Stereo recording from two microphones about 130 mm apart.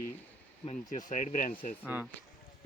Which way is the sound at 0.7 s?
70° left (ahead or behind).